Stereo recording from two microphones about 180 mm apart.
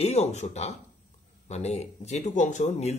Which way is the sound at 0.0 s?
40° left (ahead or behind).